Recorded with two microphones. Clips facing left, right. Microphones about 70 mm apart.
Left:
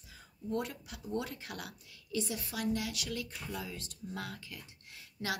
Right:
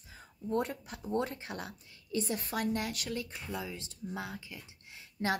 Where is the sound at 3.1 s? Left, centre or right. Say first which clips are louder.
Right 2 dB; right.